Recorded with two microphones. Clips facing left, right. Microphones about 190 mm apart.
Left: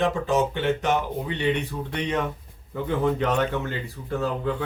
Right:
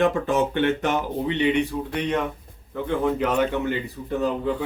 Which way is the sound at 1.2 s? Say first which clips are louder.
Right 4 dB; 15° right (ahead or behind).